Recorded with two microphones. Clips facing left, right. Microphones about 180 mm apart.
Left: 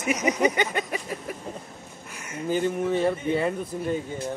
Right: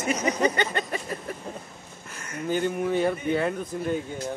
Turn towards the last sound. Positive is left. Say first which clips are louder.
# even
turn(degrees=0)  # may be behind; listen again after turning